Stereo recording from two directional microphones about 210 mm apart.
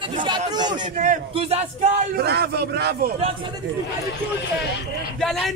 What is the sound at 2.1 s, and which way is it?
Speech, 50° right (ahead or behind).